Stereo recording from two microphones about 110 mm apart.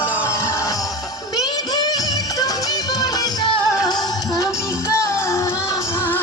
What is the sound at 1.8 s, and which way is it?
Music, 35° left (ahead or behind).